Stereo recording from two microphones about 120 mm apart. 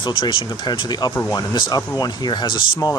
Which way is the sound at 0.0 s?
40° left (ahead or behind).